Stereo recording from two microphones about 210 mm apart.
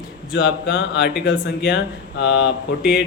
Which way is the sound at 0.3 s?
60° left (ahead or behind).